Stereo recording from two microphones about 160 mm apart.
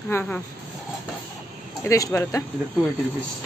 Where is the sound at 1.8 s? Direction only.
20° left (ahead or behind).